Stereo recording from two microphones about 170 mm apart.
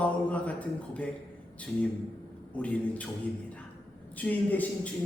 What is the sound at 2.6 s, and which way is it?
Speech, 10° left (ahead or behind).